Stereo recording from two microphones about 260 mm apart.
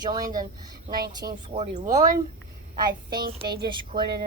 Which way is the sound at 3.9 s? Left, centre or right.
Right.